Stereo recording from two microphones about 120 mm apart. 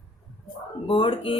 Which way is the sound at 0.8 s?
50° left (ahead or behind).